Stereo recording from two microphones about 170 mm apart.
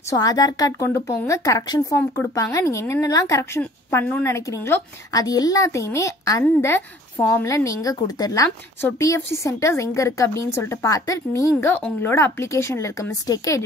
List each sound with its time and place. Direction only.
0.1 s a woman's voice: 20° left (ahead or behind)